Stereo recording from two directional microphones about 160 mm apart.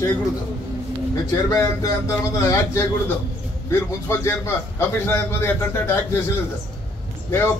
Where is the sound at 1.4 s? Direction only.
20° left (ahead or behind).